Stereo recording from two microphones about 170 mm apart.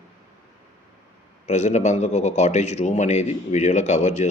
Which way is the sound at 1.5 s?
45° left (ahead or behind).